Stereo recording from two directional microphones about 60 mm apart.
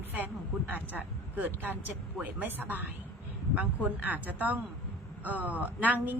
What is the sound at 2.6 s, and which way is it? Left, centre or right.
A man's voice, right.